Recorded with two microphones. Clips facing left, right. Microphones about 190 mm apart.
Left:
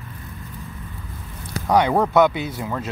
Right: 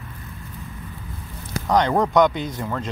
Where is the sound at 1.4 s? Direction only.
10° left (ahead or behind).